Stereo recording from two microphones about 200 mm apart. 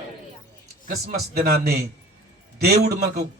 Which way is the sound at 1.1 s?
50° right (ahead or behind).